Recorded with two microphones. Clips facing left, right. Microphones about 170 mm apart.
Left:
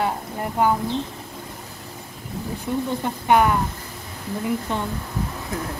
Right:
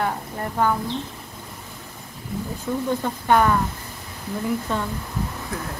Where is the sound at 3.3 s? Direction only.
15° left (ahead or behind).